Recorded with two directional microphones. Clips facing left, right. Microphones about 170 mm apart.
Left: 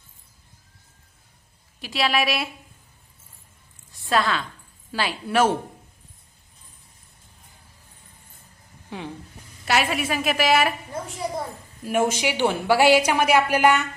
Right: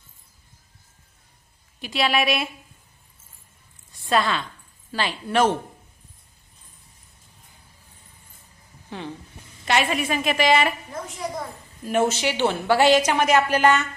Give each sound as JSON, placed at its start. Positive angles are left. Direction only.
{"t": 1.8, "sound": "a woman's voice", "side_deg": 0}
{"t": 3.9, "sound": "a woman's voice", "side_deg": 0}
{"t": 8.9, "sound": "a woman's voice", "side_deg": 10}
{"t": 10.9, "sound": "a woman's voice", "side_deg": 25}
{"t": 11.9, "sound": "a woman's voice", "side_deg": 10}